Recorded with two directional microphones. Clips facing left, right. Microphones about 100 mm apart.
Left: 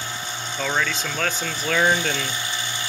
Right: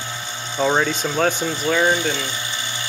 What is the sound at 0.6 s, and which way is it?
Speech, 30° right (ahead or behind).